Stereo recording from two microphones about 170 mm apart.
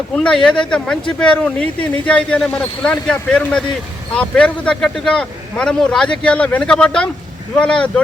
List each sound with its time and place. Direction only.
0.1 s speech: 5° left (ahead or behind)